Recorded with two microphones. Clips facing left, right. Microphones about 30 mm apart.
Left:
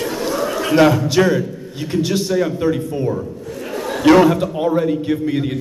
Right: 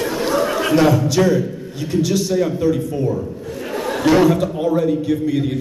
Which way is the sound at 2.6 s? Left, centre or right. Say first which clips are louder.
Even; left.